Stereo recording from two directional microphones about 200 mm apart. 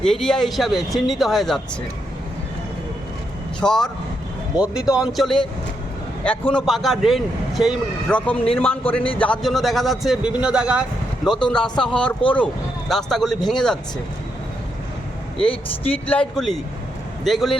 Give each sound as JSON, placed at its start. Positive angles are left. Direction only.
{"t": 0.0, "sound": "a man's voice", "side_deg": 0}
{"t": 3.6, "sound": "a man's voice", "side_deg": 0}
{"t": 15.4, "sound": "speech", "side_deg": 25}
{"t": 15.9, "sound": "a man's voice", "side_deg": 5}